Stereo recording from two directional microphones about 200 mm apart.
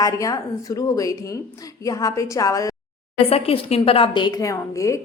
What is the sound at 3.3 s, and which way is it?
A woman's voice, 30° left (ahead or behind).